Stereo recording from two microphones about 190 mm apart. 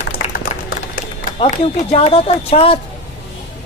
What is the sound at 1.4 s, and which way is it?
A woman's voice, 30° left (ahead or behind).